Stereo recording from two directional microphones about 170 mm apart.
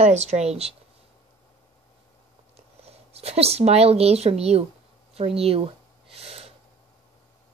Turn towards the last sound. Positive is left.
turn(degrees=-35)  # may be behind; listen again after turning